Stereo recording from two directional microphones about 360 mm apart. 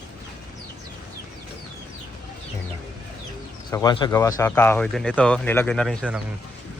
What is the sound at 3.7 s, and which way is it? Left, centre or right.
Speech, centre.